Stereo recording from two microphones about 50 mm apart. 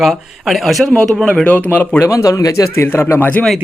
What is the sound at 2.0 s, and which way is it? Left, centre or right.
Speech, left.